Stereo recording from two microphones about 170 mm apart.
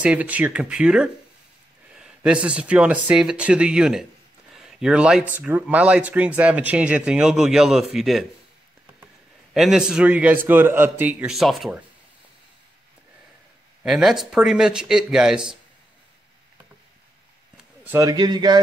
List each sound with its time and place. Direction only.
0.0 s speech: 10° right (ahead or behind)
9.5 s speech: centre (ahead or behind)
13.8 s speech: centre (ahead or behind)
17.8 s speech: 15° right (ahead or behind)